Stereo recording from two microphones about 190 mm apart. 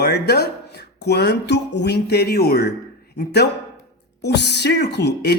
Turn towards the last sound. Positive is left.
turn(degrees=60)  # may be behind; listen again after turning